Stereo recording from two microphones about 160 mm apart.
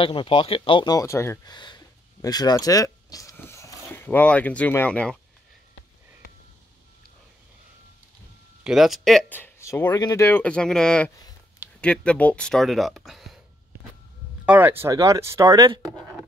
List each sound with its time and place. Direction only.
0.0 s speech: 30° left (ahead or behind); by 5.1 s 10° left (ahead or behind)
8.6 s speech: centre (ahead or behind)
9.3 s speech: 15° left (ahead or behind); by 13.4 s centre (ahead or behind)
14.4 s speech: 10° right (ahead or behind)